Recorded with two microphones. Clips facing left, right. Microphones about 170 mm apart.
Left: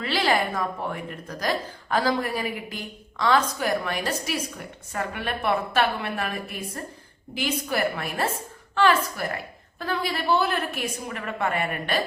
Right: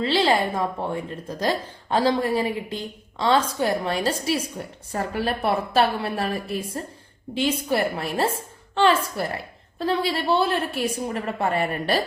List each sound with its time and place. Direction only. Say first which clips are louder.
0.0 s a woman's voice: right 3 dB; 25° right (ahead or behind)